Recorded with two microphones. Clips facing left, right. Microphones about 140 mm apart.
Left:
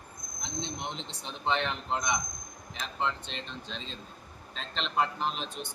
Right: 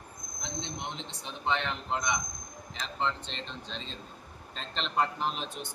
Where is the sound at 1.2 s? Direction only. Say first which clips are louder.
Left 1 dB; 20° left (ahead or behind).